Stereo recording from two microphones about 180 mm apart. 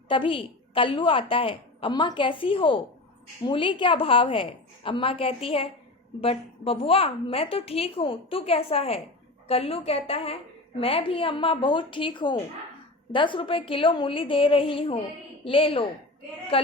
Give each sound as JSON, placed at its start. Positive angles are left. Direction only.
{"t": 0.1, "sound": "a woman's voice", "side_deg": 30}